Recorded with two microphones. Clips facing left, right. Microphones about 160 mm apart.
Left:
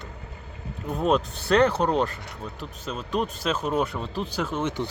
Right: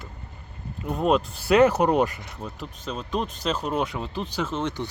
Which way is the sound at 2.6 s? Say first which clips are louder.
Right 1 dB; 5° left (ahead or behind).